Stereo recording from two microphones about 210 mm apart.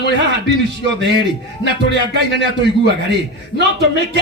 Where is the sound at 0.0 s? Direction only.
55° right (ahead or behind).